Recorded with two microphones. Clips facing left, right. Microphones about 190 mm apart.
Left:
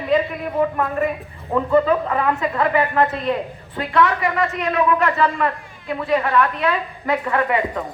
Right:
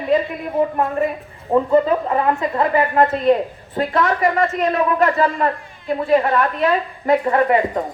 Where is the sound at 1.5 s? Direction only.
30° right (ahead or behind).